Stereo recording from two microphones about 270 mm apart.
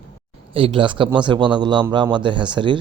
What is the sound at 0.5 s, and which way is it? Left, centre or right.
A man's voice, centre.